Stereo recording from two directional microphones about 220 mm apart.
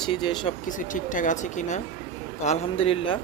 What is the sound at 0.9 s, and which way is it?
Speech, 35° left (ahead or behind).